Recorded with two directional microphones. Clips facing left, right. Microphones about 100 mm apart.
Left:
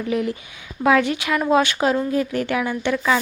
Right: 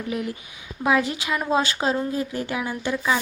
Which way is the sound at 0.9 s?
20° right (ahead or behind).